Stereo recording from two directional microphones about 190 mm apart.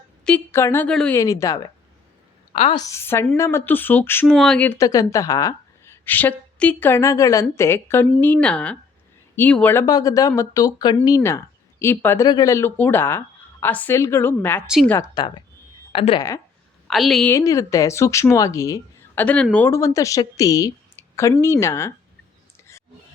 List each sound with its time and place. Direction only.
0.3 s a woman's voice: 10° left (ahead or behind)
1.1 s a woman's voice: 15° left (ahead or behind)
2.5 s a woman's voice: 30° left (ahead or behind)
2.8 s a woman's voice: 15° left (ahead or behind)
15.1 s speech: 25° left (ahead or behind)
16.9 s a woman's voice: centre (ahead or behind)
17.3 s a woman's voice: 15° left (ahead or behind)